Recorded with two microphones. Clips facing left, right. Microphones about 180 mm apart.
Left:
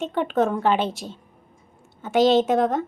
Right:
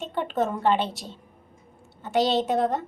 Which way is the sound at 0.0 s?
Centre (ahead or behind).